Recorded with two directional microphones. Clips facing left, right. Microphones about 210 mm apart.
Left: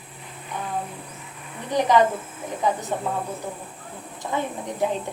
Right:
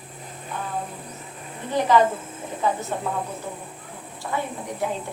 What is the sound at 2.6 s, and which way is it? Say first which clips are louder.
Speech: even; 15° left (ahead or behind).